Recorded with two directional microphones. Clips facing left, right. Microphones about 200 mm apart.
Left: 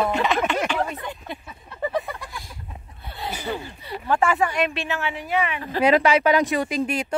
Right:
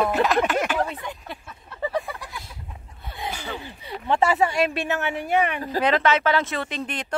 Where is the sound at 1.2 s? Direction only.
Centre (ahead or behind).